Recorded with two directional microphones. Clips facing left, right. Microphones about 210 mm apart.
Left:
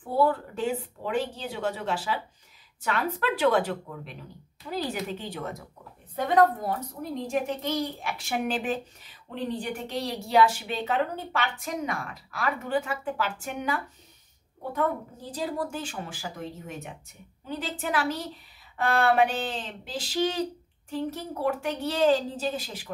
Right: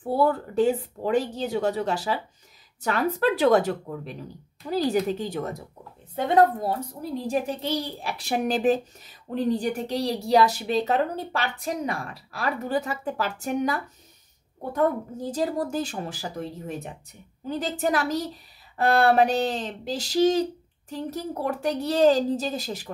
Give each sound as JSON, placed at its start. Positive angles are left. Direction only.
{"t": 0.2, "sound": "a child's voice", "side_deg": -40}
{"t": 6.1, "sound": "a child's voice", "side_deg": -30}
{"t": 15.3, "sound": "a child's voice", "side_deg": -40}